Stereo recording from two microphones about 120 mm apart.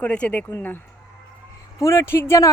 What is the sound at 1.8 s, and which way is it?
Speech, 25° left (ahead or behind).